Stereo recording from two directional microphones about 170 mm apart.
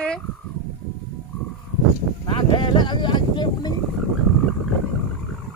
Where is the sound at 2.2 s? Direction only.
30° left (ahead or behind).